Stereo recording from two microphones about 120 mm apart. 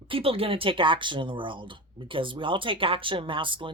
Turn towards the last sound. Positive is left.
turn(degrees=-45)  # may be behind; listen again after turning